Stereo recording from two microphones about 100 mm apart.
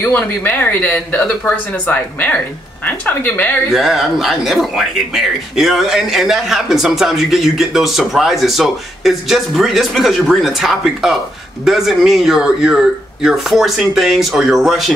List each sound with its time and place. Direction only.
0.0 s speech: 15° left (ahead or behind)
3.7 s speech: centre (ahead or behind)